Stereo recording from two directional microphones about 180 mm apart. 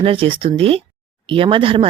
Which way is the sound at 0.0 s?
30° right (ahead or behind).